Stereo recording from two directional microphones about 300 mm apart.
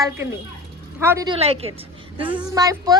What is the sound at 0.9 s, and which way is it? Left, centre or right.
A woman's voice, centre.